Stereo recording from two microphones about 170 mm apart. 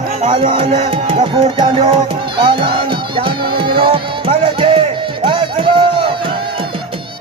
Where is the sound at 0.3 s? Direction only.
30° right (ahead or behind).